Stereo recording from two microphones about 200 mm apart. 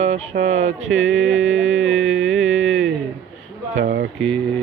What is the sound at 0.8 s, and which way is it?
Music, 75° right (ahead or behind).